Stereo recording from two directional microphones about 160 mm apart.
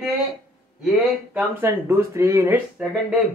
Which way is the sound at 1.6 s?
15° right (ahead or behind).